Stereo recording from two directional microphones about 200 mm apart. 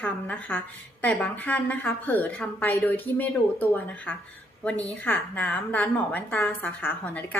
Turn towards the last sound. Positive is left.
turn(degrees=10)  # may be behind; listen again after turning